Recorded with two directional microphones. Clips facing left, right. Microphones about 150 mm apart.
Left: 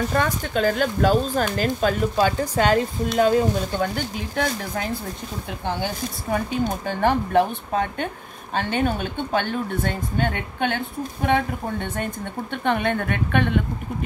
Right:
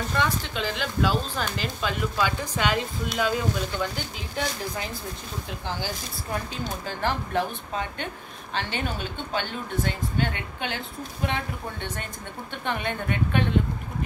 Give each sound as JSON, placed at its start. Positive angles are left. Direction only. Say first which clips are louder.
{"t": 0.1, "sound": "speech", "louder": "left 4 dB", "side_deg": 45}